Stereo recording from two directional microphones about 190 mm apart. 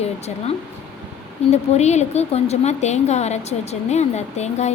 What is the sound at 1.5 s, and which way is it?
A woman's voice, 35° left (ahead or behind).